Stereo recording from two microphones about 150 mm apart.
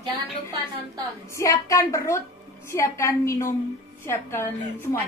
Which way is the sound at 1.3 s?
20° left (ahead or behind).